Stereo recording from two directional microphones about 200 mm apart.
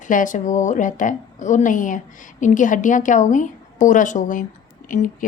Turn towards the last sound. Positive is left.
turn(degrees=40)  # may be behind; listen again after turning